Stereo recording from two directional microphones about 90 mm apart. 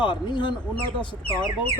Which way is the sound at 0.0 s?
60° left (ahead or behind).